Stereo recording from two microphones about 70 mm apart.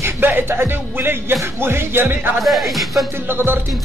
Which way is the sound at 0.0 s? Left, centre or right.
Right.